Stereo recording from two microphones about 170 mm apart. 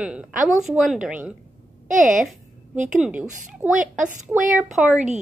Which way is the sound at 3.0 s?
10° right (ahead or behind).